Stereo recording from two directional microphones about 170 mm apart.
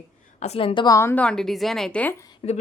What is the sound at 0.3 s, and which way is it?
Speech, 40° left (ahead or behind).